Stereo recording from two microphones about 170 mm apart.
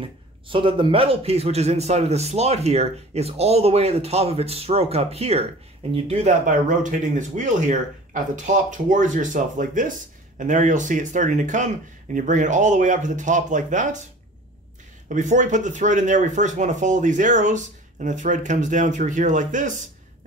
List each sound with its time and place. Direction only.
0.5 s speech: 30° right (ahead or behind); by 14.0 s 50° right (ahead or behind)
15.0 s speech: 45° right (ahead or behind)